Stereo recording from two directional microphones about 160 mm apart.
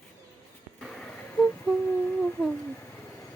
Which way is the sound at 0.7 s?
Centre (ahead or behind).